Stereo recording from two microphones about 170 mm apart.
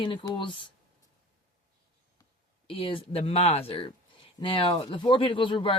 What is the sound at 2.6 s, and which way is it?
Speech, 30° left (ahead or behind).